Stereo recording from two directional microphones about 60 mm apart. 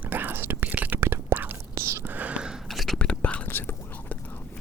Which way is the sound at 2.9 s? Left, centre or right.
Left.